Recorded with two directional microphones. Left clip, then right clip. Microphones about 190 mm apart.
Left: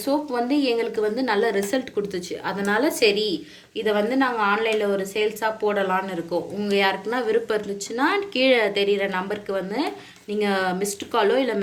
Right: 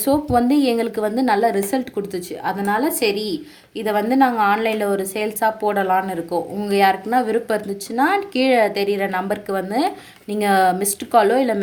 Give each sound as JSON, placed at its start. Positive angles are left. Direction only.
{"t": 0.0, "sound": "a woman's voice", "side_deg": -50}